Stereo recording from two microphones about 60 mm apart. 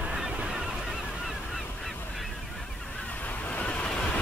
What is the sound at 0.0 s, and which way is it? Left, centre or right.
Goose, centre.